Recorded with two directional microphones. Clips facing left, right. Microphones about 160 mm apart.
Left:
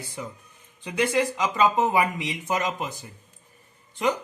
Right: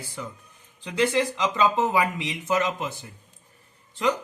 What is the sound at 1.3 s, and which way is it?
Speech, 10° left (ahead or behind).